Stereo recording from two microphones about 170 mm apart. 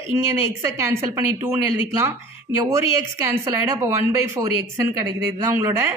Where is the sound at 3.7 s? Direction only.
15° right (ahead or behind).